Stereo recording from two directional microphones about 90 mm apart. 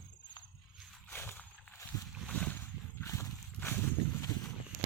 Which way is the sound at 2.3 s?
15° left (ahead or behind).